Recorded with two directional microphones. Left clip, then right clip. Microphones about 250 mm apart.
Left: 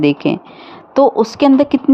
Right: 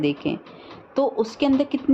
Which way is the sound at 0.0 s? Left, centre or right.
Left.